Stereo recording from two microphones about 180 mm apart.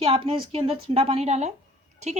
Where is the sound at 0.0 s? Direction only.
30° right (ahead or behind).